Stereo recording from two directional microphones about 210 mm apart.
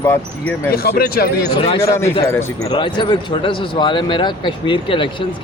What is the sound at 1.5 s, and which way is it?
Speech, 25° left (ahead or behind).